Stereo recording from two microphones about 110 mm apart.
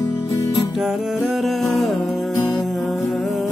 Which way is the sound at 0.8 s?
Centre (ahead or behind).